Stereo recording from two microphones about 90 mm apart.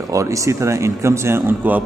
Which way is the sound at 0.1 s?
35° right (ahead or behind).